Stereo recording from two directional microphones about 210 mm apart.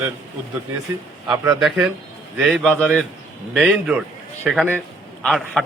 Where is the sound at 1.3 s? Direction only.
20° right (ahead or behind).